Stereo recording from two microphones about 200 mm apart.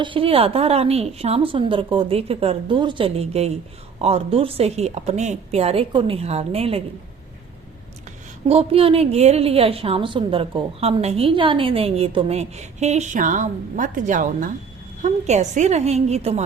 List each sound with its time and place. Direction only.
0.0 s a woman's voice: 25° right (ahead or behind)
8.4 s a woman's voice: 30° right (ahead or behind)